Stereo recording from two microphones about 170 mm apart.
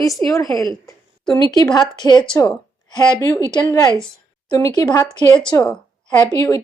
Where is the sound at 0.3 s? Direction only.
20° left (ahead or behind).